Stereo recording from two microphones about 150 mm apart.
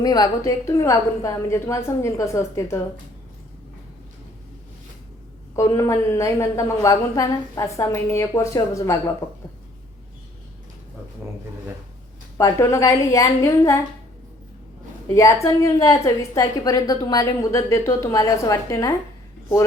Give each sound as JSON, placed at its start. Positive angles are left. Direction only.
{"t": 0.0, "sound": "a woman's voice", "side_deg": 25}
{"t": 5.5, "sound": "a woman's voice", "side_deg": 20}
{"t": 12.4, "sound": "a woman's voice", "side_deg": 20}
{"t": 15.0, "sound": "a woman's voice", "side_deg": 20}